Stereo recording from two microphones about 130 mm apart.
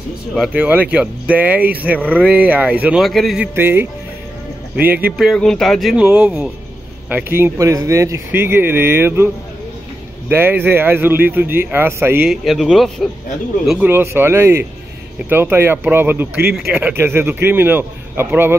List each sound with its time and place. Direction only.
0.4 s speech: 10° right (ahead or behind)
3.0 s speech: centre (ahead or behind)
3.5 s speech: 15° right (ahead or behind)
4.8 s speech: 15° right (ahead or behind)
5.1 s speech: centre (ahead or behind); by 9.3 s 15° right (ahead or behind)
10.3 s speech: 15° right (ahead or behind)
12.3 s speech: centre (ahead or behind)
13.7 s speech: 15° right (ahead or behind)